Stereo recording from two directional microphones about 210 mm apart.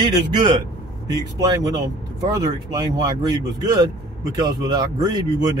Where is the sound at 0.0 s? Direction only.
20° right (ahead or behind).